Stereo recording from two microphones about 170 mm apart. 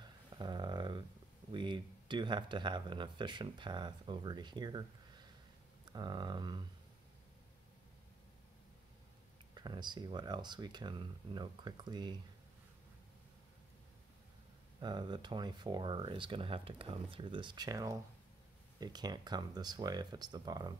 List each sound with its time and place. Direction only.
0.3 s a sound: 25° right (ahead or behind)
1.5 s speech: 30° right (ahead or behind)
9.5 s speech: 25° right (ahead or behind)
14.8 s speech: 25° right (ahead or behind)